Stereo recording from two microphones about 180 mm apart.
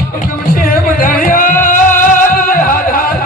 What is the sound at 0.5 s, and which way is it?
Music, 50° left (ahead or behind).